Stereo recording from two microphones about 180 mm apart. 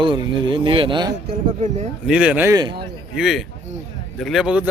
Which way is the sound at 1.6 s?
40° right (ahead or behind).